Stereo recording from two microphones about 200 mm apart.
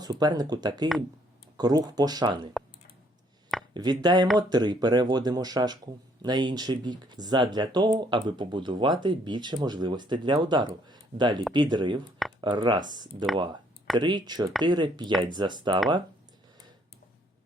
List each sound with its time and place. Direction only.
0.0 s speech: 20° right (ahead or behind)
3.8 s speech: 20° right (ahead or behind)